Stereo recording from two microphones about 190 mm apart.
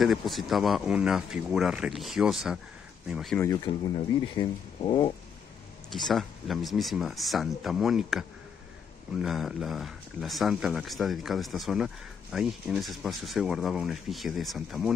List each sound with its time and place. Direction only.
0.0 s speech: centre (ahead or behind)
3.3 s speech: 20° left (ahead or behind)
5.9 s speech: centre (ahead or behind)